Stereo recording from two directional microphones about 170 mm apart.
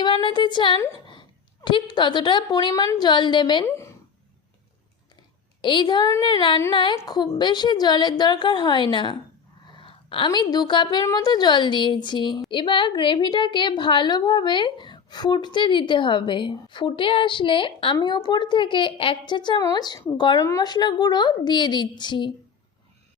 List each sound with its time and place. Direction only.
0.0 s a woman's voice: 30° left (ahead or behind)
3.7 s speech: 15° left (ahead or behind)
5.6 s a woman's voice: 25° left (ahead or behind)